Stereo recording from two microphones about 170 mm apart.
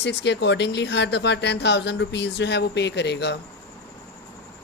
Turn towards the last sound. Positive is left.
turn(degrees=80)